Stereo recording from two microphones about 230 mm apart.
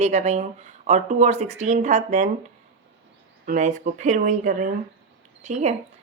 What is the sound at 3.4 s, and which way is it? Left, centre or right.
Speech, right.